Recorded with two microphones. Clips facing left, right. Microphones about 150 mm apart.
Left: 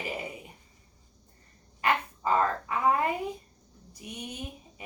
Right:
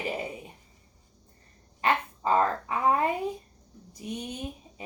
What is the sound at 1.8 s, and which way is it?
Speech, 30° right (ahead or behind).